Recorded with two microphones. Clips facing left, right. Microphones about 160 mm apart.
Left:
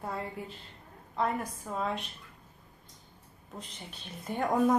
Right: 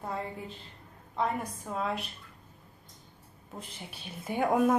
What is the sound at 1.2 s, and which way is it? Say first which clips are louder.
Speech: even; centre (ahead or behind).